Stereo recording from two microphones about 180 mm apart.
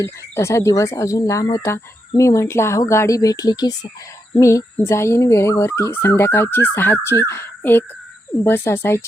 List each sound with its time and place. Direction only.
0.0 s speech: 15° left (ahead or behind)